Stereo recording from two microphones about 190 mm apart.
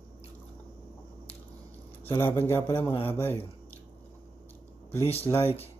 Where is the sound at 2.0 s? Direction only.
10° left (ahead or behind).